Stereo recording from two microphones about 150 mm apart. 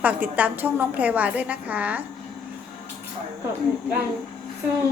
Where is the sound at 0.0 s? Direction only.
10° right (ahead or behind).